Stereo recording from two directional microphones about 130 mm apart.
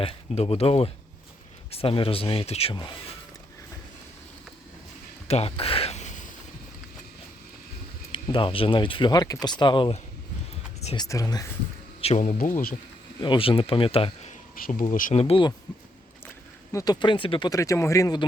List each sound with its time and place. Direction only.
0.0 s speech: 50° left (ahead or behind)
5.3 s a sound: 50° left (ahead or behind); by 6.3 s 70° left (ahead or behind)
8.1 s speech: 40° left (ahead or behind)
10.9 s speech: 30° left (ahead or behind)
11.9 s speech: 55° left (ahead or behind); by 12.6 s 90° left
13.2 s speech: 40° left (ahead or behind); by 15.1 s 90° left
15.1 s speech: 50° left (ahead or behind)
16.7 s speech: 30° left (ahead or behind)
17.5 s speech: 25° left (ahead or behind)